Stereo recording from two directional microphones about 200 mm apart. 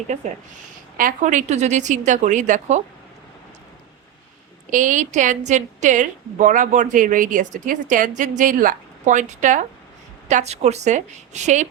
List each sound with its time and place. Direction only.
0.1 s a woman's voice: 35° right (ahead or behind)
4.7 s a woman's voice: 40° right (ahead or behind)